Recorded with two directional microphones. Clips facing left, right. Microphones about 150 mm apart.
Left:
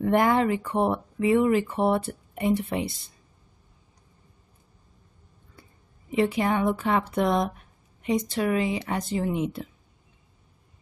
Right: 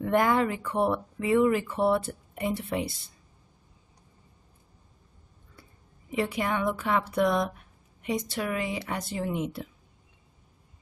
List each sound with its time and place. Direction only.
0.0 s speech: 30° left (ahead or behind)
6.1 s speech: 25° left (ahead or behind)